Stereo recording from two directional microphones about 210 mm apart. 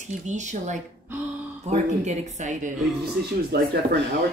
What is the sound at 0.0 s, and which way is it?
Speech, 35° right (ahead or behind).